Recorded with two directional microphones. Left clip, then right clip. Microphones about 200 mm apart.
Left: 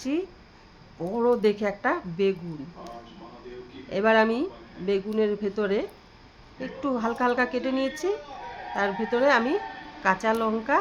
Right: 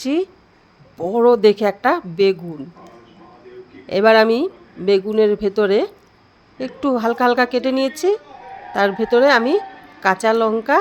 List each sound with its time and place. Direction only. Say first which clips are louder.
0.0 s a woman's voice: right 9 dB; 45° right (ahead or behind)
3.8 s a woman's voice: right 9 dB; 45° right (ahead or behind)